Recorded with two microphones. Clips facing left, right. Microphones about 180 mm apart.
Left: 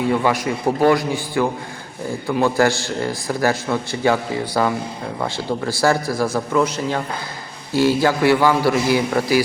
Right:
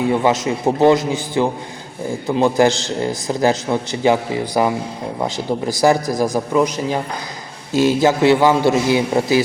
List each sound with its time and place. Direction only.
0.1 s a man's voice: 20° right (ahead or behind)